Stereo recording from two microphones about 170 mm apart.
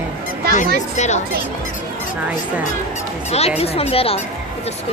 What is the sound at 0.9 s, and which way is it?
Speech, 45° left (ahead or behind).